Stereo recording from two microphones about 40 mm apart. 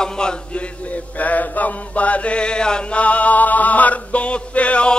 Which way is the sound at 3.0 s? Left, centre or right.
Left.